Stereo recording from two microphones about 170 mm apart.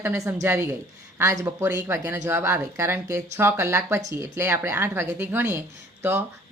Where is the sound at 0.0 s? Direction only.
15° right (ahead or behind).